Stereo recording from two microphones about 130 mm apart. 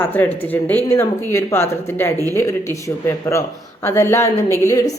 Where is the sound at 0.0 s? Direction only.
15° left (ahead or behind).